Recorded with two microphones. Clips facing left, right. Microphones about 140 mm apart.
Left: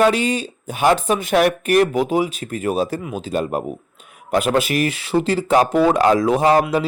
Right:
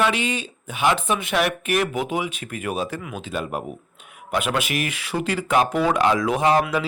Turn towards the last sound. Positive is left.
turn(degrees=35)  # may be behind; listen again after turning